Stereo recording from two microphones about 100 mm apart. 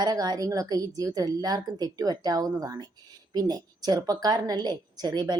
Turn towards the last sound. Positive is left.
turn(degrees=-40)  # may be behind; listen again after turning